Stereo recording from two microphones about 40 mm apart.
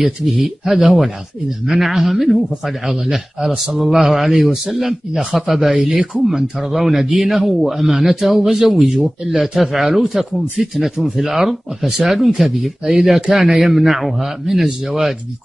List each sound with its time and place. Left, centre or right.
0.4 s speech: centre